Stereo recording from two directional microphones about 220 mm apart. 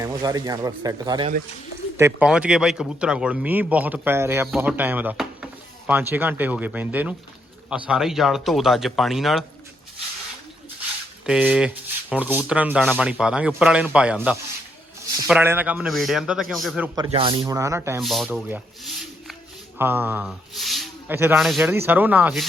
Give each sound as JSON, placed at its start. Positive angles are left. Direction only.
{"t": 0.0, "sound": "speech", "side_deg": -15}
{"t": 11.3, "sound": "speech", "side_deg": -5}
{"t": 16.9, "sound": "speech", "side_deg": -20}
{"t": 18.0, "sound": "speech", "side_deg": 0}
{"t": 19.8, "sound": "a sound", "side_deg": -10}
{"t": 21.2, "sound": "speech", "side_deg": -5}